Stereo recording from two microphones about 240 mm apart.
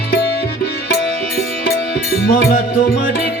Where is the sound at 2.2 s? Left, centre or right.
Left.